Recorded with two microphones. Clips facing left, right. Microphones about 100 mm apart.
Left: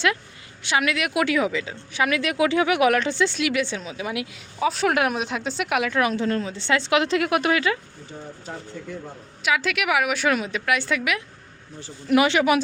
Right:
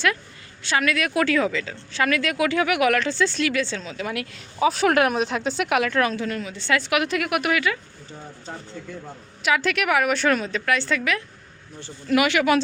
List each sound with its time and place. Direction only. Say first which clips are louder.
0.6 s a woman's voice: even; 15° left (ahead or behind)
4.6 s speech: right 2 dB; centre (ahead or behind)
6.1 s a woman's voice: left 4 dB; 30° left (ahead or behind)
9.4 s a woman's voice: right 1 dB; centre (ahead or behind)
12.0 s a woman's voice: left 1 dB; 25° left (ahead or behind)